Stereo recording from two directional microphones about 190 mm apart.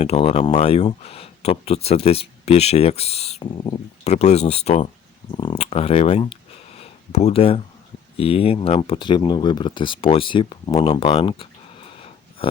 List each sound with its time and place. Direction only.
0.0 s speech: 35° left (ahead or behind)